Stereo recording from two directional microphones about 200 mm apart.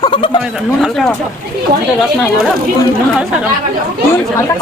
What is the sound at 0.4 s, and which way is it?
Speech, centre (ahead or behind).